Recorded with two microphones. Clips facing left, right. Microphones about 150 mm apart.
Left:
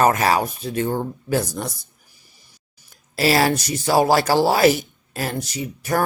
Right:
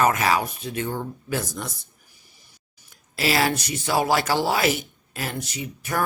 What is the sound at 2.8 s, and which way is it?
Speech, 40° left (ahead or behind).